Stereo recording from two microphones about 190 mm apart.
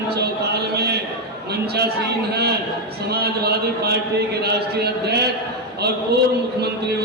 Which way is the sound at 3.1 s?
55° right (ahead or behind).